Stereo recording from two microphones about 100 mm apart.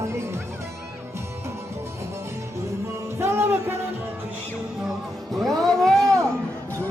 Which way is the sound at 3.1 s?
25° right (ahead or behind).